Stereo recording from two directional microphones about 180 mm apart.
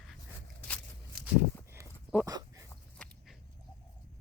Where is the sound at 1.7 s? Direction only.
15° right (ahead or behind).